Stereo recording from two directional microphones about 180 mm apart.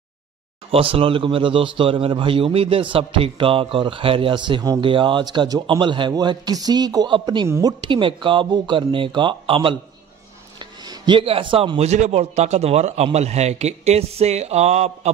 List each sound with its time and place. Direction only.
0.7 s speech: 30° right (ahead or behind)
7.4 s speech: 15° right (ahead or behind)
7.8 s speech: 30° right (ahead or behind)